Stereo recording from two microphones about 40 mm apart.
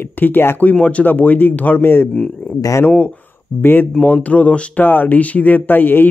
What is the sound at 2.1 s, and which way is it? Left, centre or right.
Speech, left.